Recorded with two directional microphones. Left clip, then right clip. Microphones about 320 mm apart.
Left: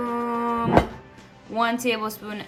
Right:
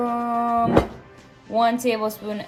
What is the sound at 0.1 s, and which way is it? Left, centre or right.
Vehicle, right.